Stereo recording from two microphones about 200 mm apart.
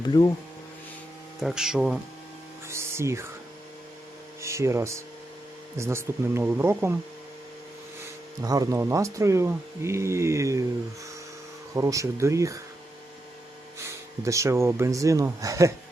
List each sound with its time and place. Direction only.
0.0 s speech: 20° left (ahead or behind)
1.4 s speech: centre (ahead or behind)
2.6 s a sound: 15° right (ahead or behind)
4.4 s speech: 15° right (ahead or behind)
8.4 s speech: 15° right (ahead or behind)
11.7 s speech: 15° right (ahead or behind)
13.7 s speech: 15° right (ahead or behind)